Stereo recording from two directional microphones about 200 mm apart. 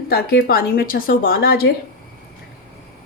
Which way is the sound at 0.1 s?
50° left (ahead or behind).